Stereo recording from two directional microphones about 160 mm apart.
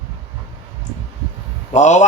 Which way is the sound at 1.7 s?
45° left (ahead or behind).